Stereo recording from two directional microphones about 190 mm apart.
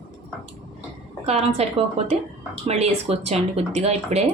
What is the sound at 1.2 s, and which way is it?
Speech, 35° right (ahead or behind).